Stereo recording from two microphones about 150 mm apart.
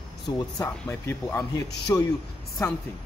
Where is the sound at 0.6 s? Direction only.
15° left (ahead or behind).